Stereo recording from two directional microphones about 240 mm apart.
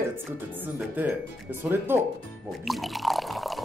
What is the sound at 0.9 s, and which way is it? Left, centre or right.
Speech, centre.